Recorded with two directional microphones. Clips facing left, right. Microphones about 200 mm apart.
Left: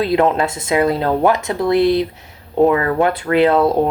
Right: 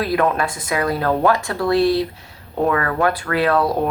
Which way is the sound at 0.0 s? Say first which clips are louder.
Left 4 dB; 25° left (ahead or behind).